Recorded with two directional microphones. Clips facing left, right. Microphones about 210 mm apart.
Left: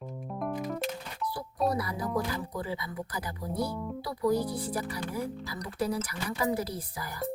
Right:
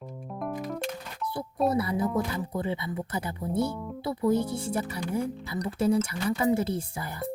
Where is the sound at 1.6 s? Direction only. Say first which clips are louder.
Right 4 dB; 25° right (ahead or behind).